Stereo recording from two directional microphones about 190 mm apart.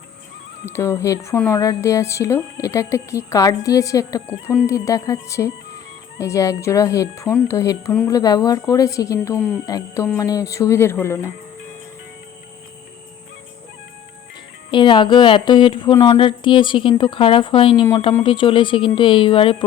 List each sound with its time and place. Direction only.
0.6 s speech: 15° left (ahead or behind)
14.7 s a woman's voice: 25° left (ahead or behind)